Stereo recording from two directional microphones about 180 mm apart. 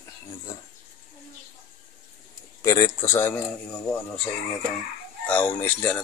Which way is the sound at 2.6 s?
15° left (ahead or behind).